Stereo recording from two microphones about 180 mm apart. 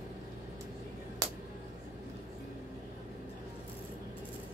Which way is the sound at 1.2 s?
20° right (ahead or behind).